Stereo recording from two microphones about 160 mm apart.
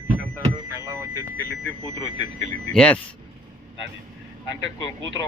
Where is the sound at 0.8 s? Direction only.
20° right (ahead or behind).